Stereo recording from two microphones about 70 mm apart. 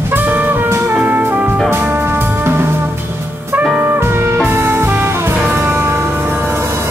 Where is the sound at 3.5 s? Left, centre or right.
Right.